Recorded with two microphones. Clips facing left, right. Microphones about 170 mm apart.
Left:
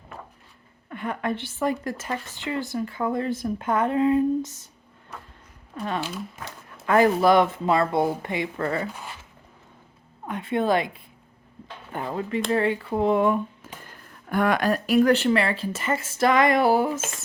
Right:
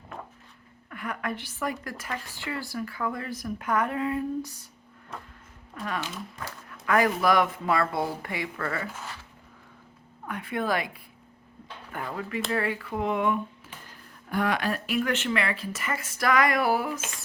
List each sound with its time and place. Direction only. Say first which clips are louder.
0.9 s a woman's voice: left 5 dB; 25° left (ahead or behind)
5.7 s a woman's voice: left 4 dB; 30° left (ahead or behind)
10.2 s a woman's voice: left 5 dB; 25° left (ahead or behind)
14.3 s a woman's voice: left 5 dB; 50° left (ahead or behind); by 17.0 s 25° left (ahead or behind)